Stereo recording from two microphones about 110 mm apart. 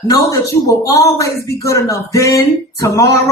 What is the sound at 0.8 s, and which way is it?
Speech, 30° left (ahead or behind).